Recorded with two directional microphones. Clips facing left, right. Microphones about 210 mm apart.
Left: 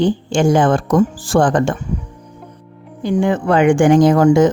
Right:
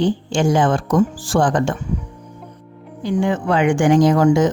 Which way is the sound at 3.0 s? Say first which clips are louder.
Left 3 dB; 50° left (ahead or behind).